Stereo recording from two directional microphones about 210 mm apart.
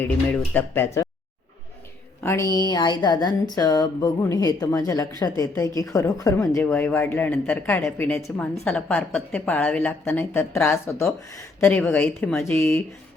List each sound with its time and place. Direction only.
0.0 s a woman's voice: 10° left (ahead or behind)
2.2 s a woman's voice: 15° left (ahead or behind)